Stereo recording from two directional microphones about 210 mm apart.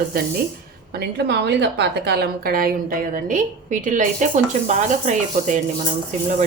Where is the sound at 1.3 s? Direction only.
55° right (ahead or behind); by 5.9 s 35° right (ahead or behind).